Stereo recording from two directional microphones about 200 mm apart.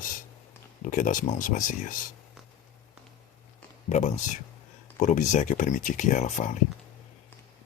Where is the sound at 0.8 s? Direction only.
40° left (ahead or behind).